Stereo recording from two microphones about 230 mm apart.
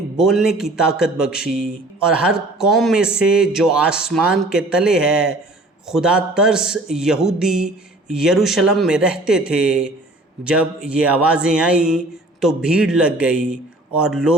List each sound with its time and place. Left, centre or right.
0.2 s a man's voice: centre